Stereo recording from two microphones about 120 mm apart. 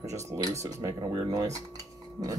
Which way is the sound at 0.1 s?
25° right (ahead or behind).